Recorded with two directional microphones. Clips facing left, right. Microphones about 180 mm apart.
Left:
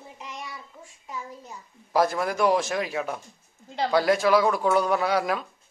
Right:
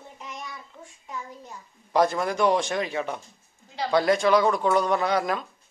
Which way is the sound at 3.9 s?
5° left (ahead or behind).